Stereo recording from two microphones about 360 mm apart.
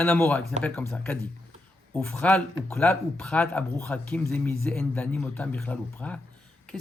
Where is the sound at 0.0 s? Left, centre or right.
Centre.